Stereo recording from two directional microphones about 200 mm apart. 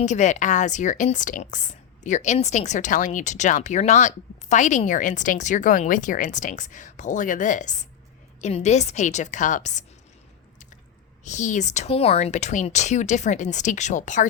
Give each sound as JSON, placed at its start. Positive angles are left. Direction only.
{"t": 0.0, "sound": "a woman's voice", "side_deg": 35}
{"t": 11.2, "sound": "a woman's voice", "side_deg": 35}